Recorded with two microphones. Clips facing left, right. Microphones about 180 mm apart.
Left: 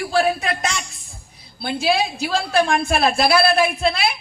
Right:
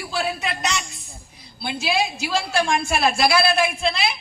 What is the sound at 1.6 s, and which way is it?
A woman's voice, 55° left (ahead or behind).